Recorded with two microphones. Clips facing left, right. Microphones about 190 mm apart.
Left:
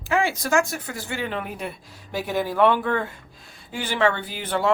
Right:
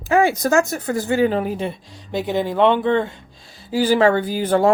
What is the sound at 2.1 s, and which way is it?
Speech, 20° right (ahead or behind).